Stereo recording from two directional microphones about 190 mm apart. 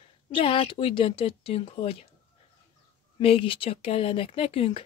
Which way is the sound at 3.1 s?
30° left (ahead or behind).